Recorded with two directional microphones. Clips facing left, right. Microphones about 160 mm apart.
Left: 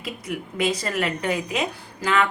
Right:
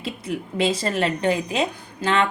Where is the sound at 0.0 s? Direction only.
30° right (ahead or behind).